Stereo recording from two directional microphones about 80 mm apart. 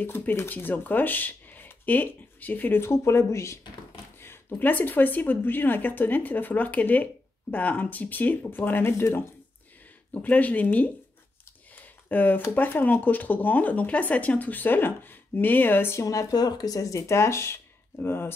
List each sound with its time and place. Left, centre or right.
0.0 s speech: left
10.1 s speech: centre
16.0 s speech: left